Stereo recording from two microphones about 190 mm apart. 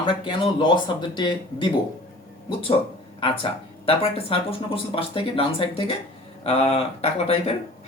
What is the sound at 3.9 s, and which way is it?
Speech, 30° left (ahead or behind).